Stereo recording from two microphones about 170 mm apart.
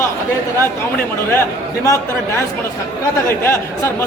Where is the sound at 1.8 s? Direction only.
15° left (ahead or behind).